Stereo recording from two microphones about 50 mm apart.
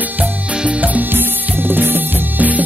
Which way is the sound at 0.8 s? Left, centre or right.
Right.